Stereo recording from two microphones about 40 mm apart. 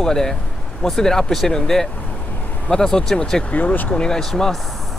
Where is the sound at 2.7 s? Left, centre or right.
Centre.